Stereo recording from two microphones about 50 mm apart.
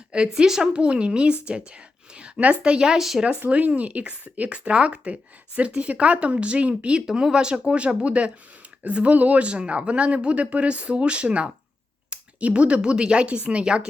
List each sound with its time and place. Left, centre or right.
0.1 s speech: centre
3.5 s speech: right
7.1 s speech: centre